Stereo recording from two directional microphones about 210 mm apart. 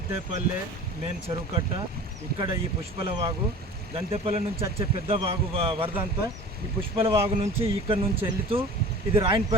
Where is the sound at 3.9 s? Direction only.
30° right (ahead or behind).